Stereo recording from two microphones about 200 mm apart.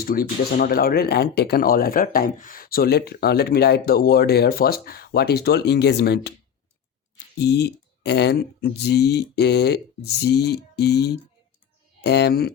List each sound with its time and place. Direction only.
0.0 s speech: 50° left (ahead or behind)
7.3 s speech: 55° left (ahead or behind)